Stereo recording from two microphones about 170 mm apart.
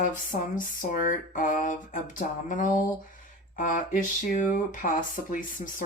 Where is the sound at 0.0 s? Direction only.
50° left (ahead or behind).